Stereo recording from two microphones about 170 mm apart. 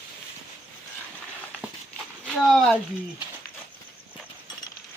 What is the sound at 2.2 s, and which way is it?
Speech, centre (ahead or behind).